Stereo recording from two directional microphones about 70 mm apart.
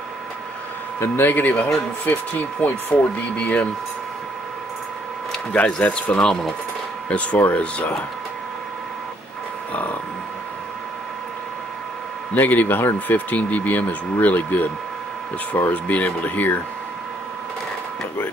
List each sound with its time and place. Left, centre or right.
0.9 s speech: left
5.5 s speech: centre
12.4 s speech: left
15.7 s speech: left